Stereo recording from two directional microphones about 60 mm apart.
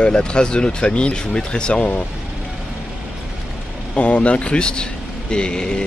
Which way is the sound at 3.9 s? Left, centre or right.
Left.